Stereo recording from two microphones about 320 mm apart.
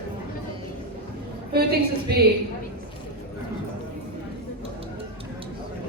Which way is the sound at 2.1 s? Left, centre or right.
Right.